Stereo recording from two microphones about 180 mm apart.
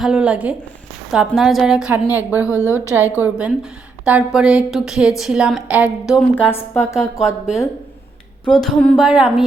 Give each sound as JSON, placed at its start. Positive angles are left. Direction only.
{"t": 0.0, "sound": "a woman's voice", "side_deg": -5}
{"t": 2.5, "sound": "a woman's voice", "side_deg": 15}
{"t": 2.9, "sound": "a woman's voice", "side_deg": -10}
{"t": 6.3, "sound": "a woman's voice", "side_deg": 10}
{"t": 7.2, "sound": "a woman's voice", "side_deg": -5}
{"t": 8.6, "sound": "a woman's voice", "side_deg": 5}